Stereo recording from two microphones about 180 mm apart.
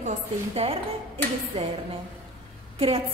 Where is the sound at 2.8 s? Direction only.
35° right (ahead or behind).